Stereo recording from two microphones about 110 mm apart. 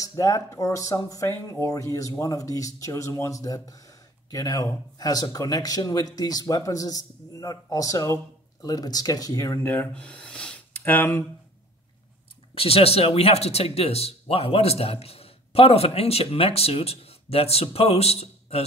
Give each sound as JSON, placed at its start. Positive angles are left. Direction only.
{"t": 0.0, "sound": "speech", "side_deg": 30}
{"t": 12.5, "sound": "speech", "side_deg": 65}